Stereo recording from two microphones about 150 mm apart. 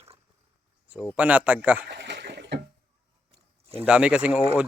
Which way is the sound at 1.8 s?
90° right.